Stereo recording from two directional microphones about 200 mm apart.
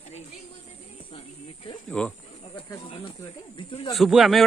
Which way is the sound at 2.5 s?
25° left (ahead or behind).